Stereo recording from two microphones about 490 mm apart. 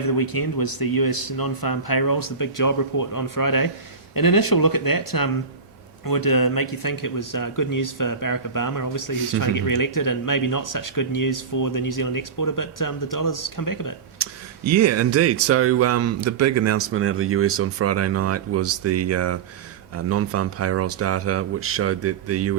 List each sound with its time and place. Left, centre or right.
0.0 s speech: left
14.2 s speech: right